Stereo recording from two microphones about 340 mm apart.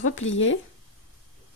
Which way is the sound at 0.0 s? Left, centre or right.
Left.